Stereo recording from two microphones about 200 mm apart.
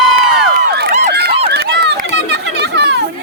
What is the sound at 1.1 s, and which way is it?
Run, 55° right (ahead or behind).